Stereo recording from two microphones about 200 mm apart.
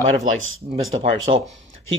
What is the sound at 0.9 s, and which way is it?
Speech, 25° right (ahead or behind).